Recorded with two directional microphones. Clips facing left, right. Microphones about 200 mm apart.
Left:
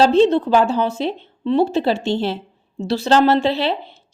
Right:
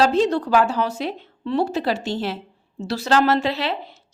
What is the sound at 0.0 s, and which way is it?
A woman's voice, 25° left (ahead or behind).